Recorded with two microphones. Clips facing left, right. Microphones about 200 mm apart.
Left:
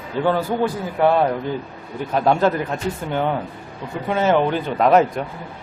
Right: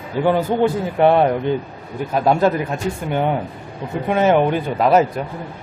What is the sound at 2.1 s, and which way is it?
Speech, 10° right (ahead or behind).